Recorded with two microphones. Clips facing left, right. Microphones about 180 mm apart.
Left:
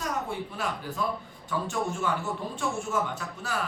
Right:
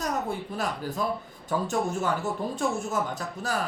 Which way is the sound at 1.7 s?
40° right (ahead or behind).